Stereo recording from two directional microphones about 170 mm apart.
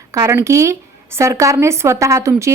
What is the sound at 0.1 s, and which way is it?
A woman's voice, 15° right (ahead or behind).